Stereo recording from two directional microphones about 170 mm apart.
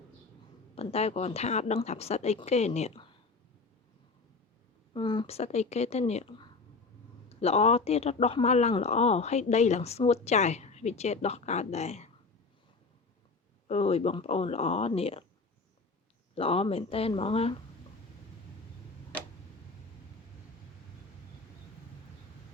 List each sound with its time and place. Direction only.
0.8 s speech: 35° left (ahead or behind)
4.9 s speech: 30° left (ahead or behind)
13.7 s speech: 35° left (ahead or behind)
16.3 s speech: 35° left (ahead or behind)